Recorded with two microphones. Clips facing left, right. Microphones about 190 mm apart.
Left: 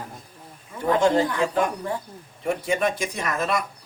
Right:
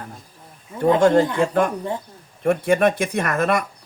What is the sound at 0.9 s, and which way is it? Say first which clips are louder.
Speech: right 4 dB; 50° right (ahead or behind).